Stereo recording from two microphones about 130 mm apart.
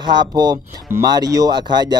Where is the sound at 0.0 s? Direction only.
35° right (ahead or behind).